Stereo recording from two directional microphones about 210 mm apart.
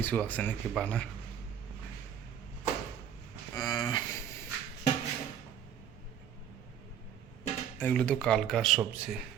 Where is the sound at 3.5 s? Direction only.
20° left (ahead or behind).